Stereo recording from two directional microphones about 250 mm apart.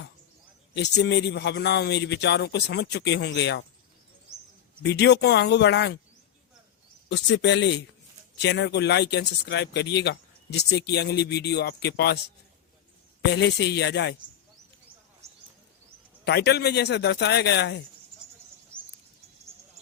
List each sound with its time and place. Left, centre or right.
0.7 s a man's voice: left
4.8 s a man's voice: left
7.1 s a man's voice: left
13.3 s a man's voice: left
16.2 s a man's voice: left
18.7 s a sound: centre